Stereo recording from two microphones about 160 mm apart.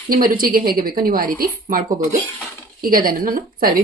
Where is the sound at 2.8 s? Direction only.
65° right (ahead or behind).